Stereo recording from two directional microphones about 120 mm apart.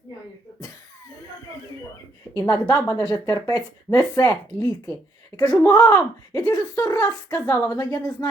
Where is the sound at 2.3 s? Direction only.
25° left (ahead or behind).